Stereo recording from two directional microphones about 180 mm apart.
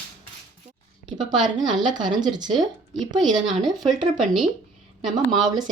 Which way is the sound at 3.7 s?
Centre (ahead or behind).